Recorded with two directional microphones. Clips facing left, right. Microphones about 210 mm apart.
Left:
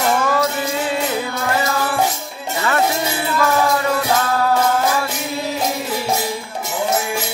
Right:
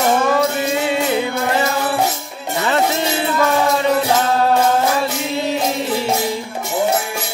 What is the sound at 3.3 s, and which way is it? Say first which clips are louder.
Music: even; 25° right (ahead or behind).